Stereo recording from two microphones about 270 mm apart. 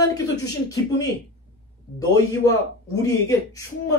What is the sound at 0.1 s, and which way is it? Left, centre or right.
Speech, centre.